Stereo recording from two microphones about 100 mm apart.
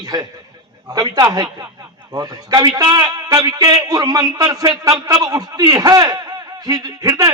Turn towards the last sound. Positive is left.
turn(degrees=-40)  # may be behind; listen again after turning